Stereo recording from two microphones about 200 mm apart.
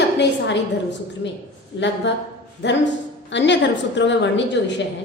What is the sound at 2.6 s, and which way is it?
A woman's voice, 60° left (ahead or behind).